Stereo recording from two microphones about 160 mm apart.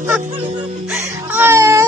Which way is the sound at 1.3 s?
15° right (ahead or behind).